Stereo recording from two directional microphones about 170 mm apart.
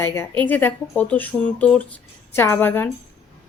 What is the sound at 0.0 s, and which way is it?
A woman's voice, 15° left (ahead or behind).